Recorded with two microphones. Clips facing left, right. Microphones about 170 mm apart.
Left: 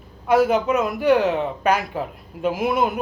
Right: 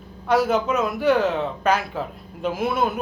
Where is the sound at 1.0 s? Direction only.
15° left (ahead or behind).